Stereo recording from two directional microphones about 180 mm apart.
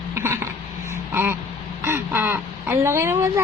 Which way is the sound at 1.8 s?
10° right (ahead or behind).